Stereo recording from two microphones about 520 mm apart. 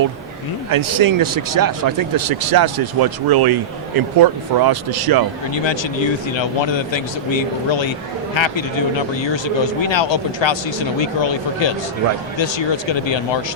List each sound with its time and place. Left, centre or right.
0.7 s speech: right
5.5 s speech: left